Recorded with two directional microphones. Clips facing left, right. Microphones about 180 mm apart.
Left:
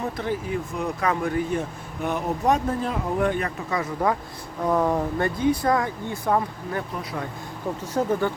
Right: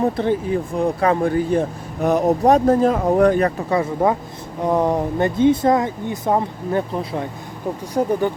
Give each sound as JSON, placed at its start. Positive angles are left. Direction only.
{"t": 0.0, "sound": "speech", "side_deg": -30}
{"t": 8.0, "sound": "speech", "side_deg": -15}